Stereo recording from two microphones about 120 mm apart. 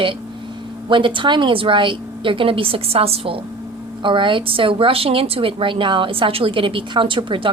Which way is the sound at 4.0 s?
45° right (ahead or behind).